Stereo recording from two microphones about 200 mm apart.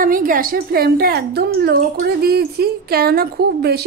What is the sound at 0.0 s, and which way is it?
A woman's voice, 45° right (ahead or behind).